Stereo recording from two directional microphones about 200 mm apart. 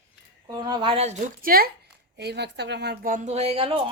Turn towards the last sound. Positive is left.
turn(degrees=-30)  # may be behind; listen again after turning